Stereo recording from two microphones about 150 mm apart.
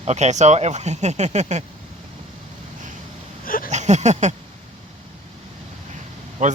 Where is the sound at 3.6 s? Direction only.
50° right (ahead or behind).